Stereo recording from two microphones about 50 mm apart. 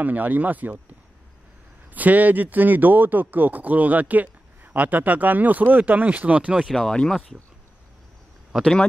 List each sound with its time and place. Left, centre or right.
0.0 s speech: right
2.0 s speech: right
6.7 s speech: centre